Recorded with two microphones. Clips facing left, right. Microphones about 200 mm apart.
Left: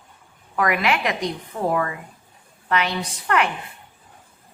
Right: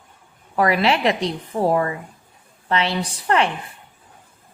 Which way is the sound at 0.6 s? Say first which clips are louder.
Right 3 dB; 30° right (ahead or behind).